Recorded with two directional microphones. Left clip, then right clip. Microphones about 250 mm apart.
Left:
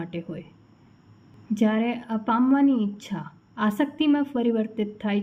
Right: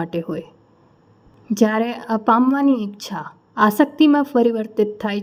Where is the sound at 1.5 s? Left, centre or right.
Right.